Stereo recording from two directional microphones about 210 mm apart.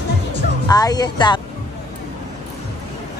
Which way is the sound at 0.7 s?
20° left (ahead or behind).